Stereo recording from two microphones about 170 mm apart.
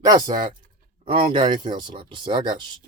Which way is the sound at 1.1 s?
35° right (ahead or behind).